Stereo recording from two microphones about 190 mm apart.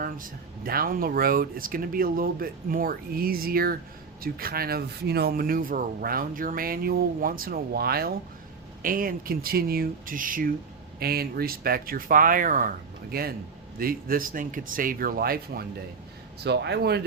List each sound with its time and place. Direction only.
0.0 s speech: 50° right (ahead or behind)